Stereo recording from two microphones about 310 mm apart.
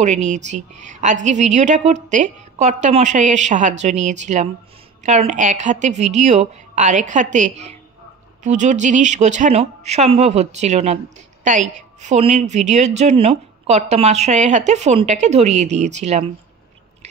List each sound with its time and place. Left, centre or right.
0.0 s a woman's voice: right